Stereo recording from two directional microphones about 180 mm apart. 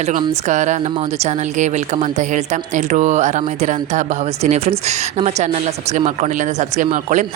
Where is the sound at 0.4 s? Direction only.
40° right (ahead or behind).